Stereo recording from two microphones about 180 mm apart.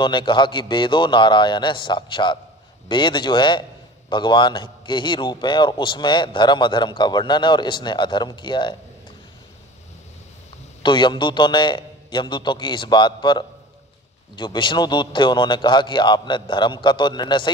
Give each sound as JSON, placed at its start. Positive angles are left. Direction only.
{"t": 0.0, "sound": "a man's voice", "side_deg": 25}
{"t": 10.8, "sound": "a man's voice", "side_deg": 25}
{"t": 14.4, "sound": "a man's voice", "side_deg": 25}